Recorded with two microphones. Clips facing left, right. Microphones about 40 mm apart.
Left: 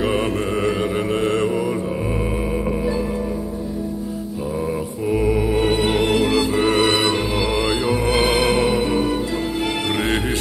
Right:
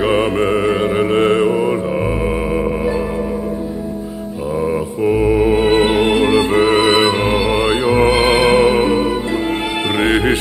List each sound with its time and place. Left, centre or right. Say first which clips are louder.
0.0 s mantra: right 6 dB; centre
1.1 s mantra: right 7 dB; right
1.4 s mantra: right 6 dB; centre
5.1 s music: right 5 dB; centre